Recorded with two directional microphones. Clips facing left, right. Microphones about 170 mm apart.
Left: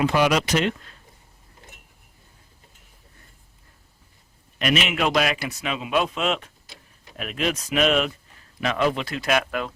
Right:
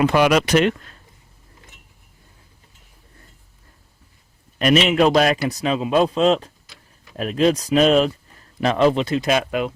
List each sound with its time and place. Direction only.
0.0 s speech: 60° right (ahead or behind)
4.5 s a man's voice: 40° right (ahead or behind); by 9.7 s 20° right (ahead or behind)